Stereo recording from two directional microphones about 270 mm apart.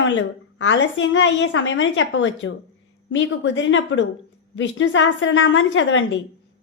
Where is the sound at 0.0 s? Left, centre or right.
Left.